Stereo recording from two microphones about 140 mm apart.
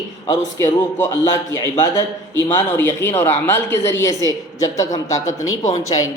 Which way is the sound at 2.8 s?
15° left (ahead or behind).